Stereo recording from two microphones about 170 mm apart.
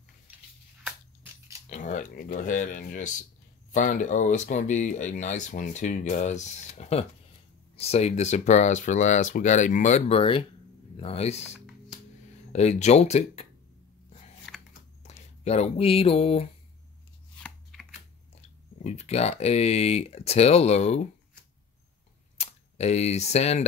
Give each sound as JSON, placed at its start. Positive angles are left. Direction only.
{"t": 0.8, "sound": "a sound", "side_deg": -15}
{"t": 1.7, "sound": "speech", "side_deg": 45}
{"t": 12.5, "sound": "speech", "side_deg": 40}
{"t": 14.5, "sound": "a sound", "side_deg": 0}
{"t": 15.0, "sound": "speech", "side_deg": 40}
{"t": 17.4, "sound": "shuffling cards", "side_deg": 0}
{"t": 18.9, "sound": "speech", "side_deg": 40}
{"t": 22.4, "sound": "speech", "side_deg": 40}